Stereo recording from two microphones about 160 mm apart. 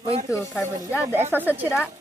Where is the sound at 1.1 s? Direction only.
10° right (ahead or behind).